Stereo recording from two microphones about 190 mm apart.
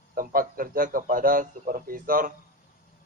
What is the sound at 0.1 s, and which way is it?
Speech, 50° right (ahead or behind).